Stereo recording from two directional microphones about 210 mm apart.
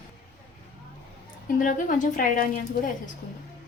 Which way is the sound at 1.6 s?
40° left (ahead or behind).